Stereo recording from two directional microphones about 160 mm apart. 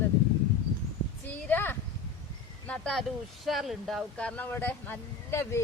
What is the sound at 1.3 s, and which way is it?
Speech, 15° left (ahead or behind).